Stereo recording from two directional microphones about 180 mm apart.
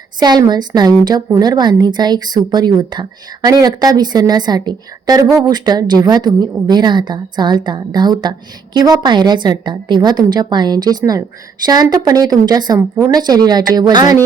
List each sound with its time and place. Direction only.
0.2 s a woman's voice: 25° right (ahead or behind)